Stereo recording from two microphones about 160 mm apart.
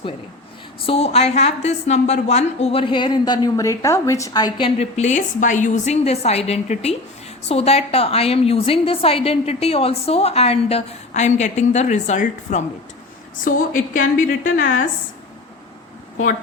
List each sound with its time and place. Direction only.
0.9 s a woman's voice: 40° left (ahead or behind)
4.9 s a woman's voice: 50° left (ahead or behind)